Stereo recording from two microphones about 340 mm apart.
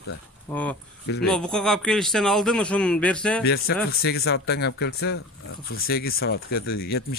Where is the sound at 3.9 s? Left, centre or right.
Left.